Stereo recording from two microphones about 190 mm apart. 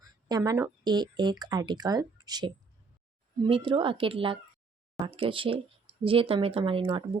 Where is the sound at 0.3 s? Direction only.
20° right (ahead or behind).